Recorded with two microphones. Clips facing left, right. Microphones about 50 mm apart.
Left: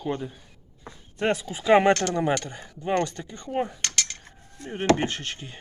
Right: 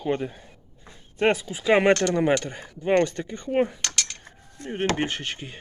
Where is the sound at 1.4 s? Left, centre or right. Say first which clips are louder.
Left 1 dB; centre.